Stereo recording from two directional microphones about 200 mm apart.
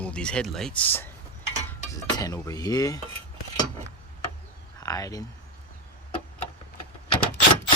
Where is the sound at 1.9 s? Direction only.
15° left (ahead or behind).